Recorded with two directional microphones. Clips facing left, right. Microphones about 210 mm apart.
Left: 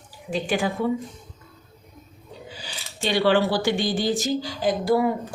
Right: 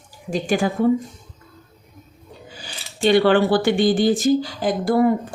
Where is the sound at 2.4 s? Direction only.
50° right (ahead or behind).